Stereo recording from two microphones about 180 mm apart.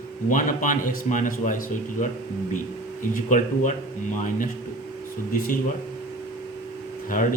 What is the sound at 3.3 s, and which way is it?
Speech, 45° left (ahead or behind).